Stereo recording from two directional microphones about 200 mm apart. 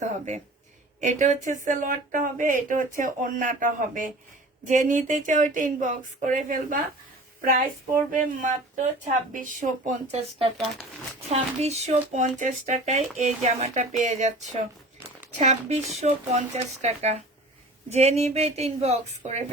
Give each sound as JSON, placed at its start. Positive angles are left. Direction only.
{"t": 0.0, "sound": "speech", "side_deg": -35}
{"t": 8.1, "sound": "speech", "side_deg": -40}
{"t": 15.4, "sound": "speech", "side_deg": -35}